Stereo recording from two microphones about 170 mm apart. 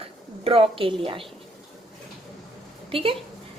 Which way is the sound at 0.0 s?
35° right (ahead or behind).